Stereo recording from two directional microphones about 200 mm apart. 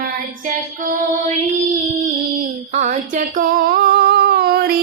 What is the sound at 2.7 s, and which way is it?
Child singing, 35° right (ahead or behind).